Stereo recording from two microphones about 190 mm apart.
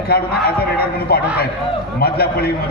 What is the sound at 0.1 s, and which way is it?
A man's voice, 55° left (ahead or behind).